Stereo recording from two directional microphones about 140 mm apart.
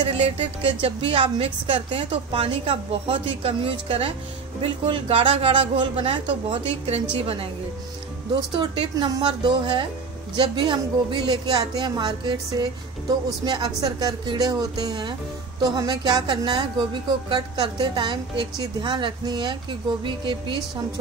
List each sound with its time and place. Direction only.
0.0 s a woman's voice: 45° right (ahead or behind)
13.5 s a woman's voice: 30° right (ahead or behind)